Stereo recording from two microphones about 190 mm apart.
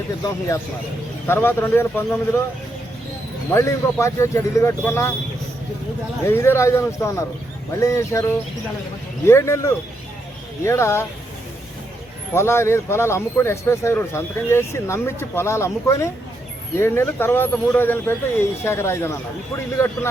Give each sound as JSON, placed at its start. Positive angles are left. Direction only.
{"t": 0.2, "sound": "speech", "side_deg": 15}
{"t": 3.5, "sound": "speech", "side_deg": 15}
{"t": 6.2, "sound": "speech", "side_deg": 15}
{"t": 12.3, "sound": "speech", "side_deg": 15}